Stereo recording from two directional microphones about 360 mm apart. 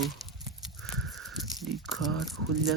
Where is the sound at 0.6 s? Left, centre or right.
Centre.